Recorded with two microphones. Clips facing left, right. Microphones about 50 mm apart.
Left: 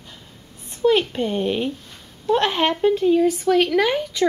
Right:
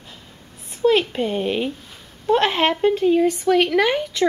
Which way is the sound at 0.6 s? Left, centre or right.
Centre.